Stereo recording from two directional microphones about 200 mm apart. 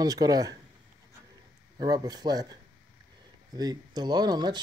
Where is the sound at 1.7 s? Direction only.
20° right (ahead or behind).